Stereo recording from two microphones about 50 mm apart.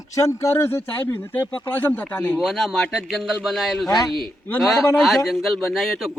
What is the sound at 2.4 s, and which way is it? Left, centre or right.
Speech, centre.